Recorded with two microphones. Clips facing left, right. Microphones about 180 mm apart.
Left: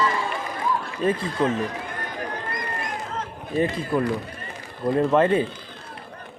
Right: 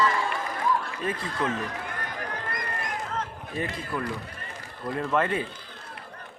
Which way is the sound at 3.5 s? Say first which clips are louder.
Left 9 dB; 30° left (ahead or behind).